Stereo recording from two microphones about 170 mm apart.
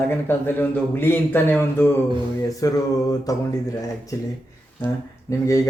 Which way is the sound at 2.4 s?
20° left (ahead or behind).